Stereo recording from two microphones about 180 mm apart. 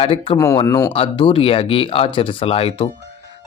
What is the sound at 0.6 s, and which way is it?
Speech, 15° left (ahead or behind).